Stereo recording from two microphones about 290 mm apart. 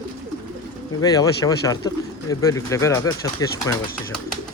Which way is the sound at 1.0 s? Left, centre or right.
Centre.